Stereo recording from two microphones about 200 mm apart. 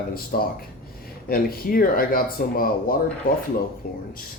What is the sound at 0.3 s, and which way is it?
Speech, 50° left (ahead or behind).